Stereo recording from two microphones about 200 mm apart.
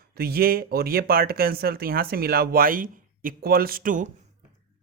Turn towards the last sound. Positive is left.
turn(degrees=-40)  # may be behind; listen again after turning